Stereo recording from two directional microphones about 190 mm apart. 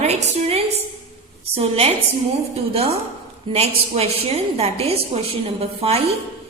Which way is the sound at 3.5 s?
25° right (ahead or behind).